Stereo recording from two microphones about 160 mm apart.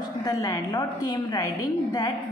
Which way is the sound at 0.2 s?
25° left (ahead or behind).